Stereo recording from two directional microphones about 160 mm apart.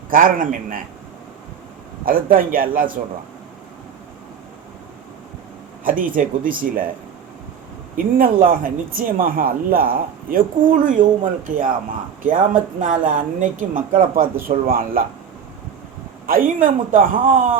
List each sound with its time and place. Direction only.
0.1 s speech: 60° right (ahead or behind)
2.0 s speech: 65° right (ahead or behind)
5.8 s speech: 60° right (ahead or behind)
7.9 s speech: 60° right (ahead or behind)
16.2 s speech: 65° right (ahead or behind)